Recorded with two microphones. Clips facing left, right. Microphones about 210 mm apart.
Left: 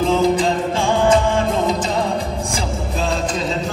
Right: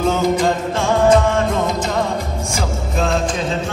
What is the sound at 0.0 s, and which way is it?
Music, 30° left (ahead or behind).